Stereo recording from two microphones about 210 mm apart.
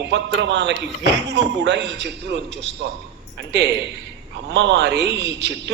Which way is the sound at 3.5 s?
55° right (ahead or behind).